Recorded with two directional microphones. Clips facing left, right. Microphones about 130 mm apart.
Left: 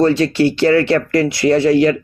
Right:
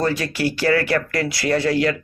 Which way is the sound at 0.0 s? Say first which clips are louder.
Left 8 dB; 25° left (ahead or behind).